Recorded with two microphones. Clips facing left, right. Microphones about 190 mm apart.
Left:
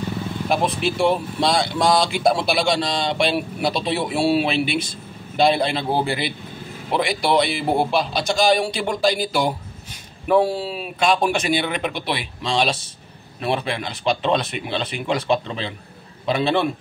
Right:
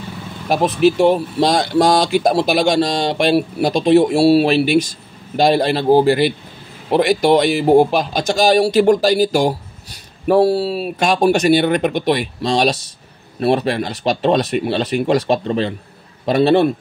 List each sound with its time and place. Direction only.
0.5 s speech: 40° right (ahead or behind)